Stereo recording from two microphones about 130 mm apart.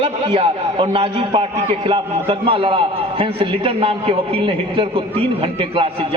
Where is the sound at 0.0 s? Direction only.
40° right (ahead or behind).